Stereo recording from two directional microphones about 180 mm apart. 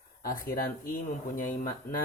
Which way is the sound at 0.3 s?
55° left (ahead or behind).